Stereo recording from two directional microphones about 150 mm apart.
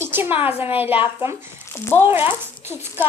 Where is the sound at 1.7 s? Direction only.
15° left (ahead or behind).